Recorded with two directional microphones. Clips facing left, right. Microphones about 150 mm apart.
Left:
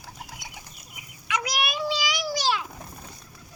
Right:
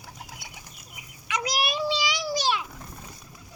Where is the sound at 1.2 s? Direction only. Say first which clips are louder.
Even; 35° right (ahead or behind).